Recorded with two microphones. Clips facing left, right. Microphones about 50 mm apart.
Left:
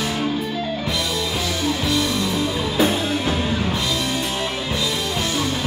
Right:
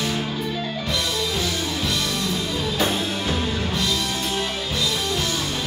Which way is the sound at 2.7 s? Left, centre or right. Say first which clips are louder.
Left 5 dB; centre.